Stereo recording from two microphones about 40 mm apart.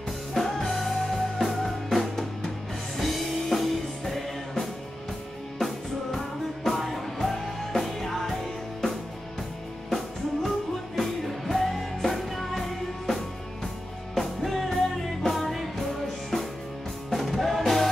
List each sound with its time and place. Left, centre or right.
0.3 s music: centre
6.1 s music: centre
9.8 s music: centre
17.1 s music: centre